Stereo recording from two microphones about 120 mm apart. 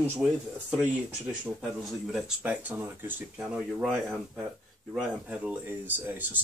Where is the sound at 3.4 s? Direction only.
5° right (ahead or behind).